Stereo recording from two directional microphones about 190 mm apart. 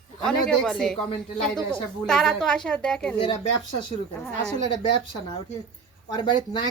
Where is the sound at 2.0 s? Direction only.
Centre (ahead or behind).